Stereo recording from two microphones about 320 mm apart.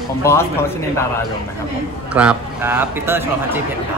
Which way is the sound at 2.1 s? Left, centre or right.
Centre.